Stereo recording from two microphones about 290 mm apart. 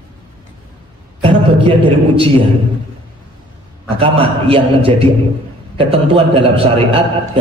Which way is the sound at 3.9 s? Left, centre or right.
Centre.